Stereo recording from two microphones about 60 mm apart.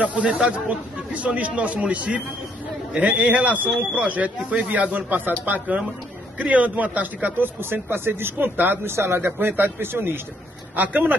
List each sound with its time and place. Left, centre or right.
0.0 s speech: right